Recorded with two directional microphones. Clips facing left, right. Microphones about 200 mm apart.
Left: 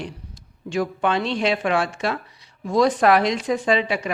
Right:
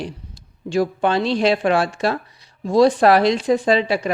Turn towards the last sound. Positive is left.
turn(degrees=-35)  # may be behind; listen again after turning